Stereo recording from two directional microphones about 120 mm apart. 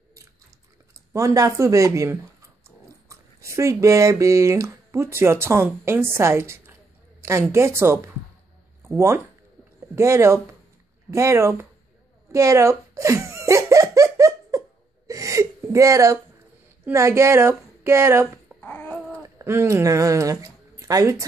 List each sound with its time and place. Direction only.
1.1 s speech: 30° right (ahead or behind)
12.3 s laughter: 25° right (ahead or behind)
15.0 s gasp: 25° right (ahead or behind)
16.8 s speech: 20° right (ahead or behind)
18.6 s babbling: 15° left (ahead or behind)
19.2 s speech: 25° right (ahead or behind)